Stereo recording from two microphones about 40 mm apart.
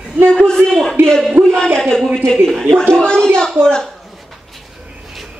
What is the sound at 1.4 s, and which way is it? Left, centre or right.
Speech, right.